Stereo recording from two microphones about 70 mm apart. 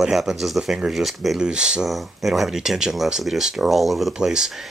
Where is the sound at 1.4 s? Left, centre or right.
Centre.